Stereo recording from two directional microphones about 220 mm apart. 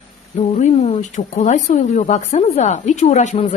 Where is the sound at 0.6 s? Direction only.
30° left (ahead or behind).